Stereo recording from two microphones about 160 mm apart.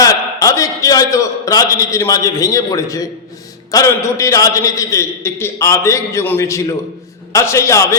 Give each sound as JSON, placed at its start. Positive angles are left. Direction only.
{"t": 0.0, "sound": "a man's voice", "side_deg": 20}